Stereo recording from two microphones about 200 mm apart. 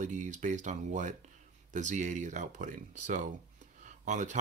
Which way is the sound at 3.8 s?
35° right (ahead or behind).